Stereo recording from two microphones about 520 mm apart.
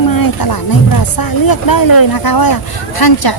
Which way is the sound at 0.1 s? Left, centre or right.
Left.